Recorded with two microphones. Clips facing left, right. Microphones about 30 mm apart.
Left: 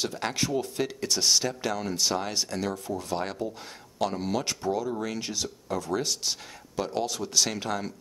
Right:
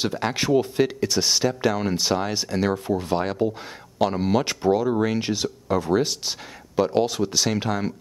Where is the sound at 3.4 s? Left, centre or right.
Right.